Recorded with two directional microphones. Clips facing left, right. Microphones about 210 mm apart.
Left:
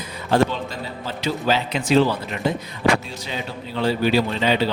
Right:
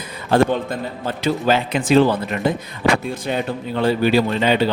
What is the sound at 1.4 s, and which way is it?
Speech, 50° right (ahead or behind).